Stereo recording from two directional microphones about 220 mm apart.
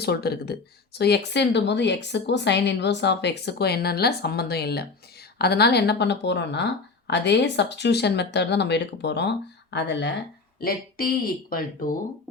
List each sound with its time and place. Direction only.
0.0 s a woman's voice: 45° left (ahead or behind)